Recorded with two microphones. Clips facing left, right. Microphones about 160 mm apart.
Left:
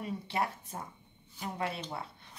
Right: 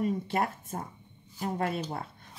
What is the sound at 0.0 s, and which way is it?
A woman's voice, 50° right (ahead or behind).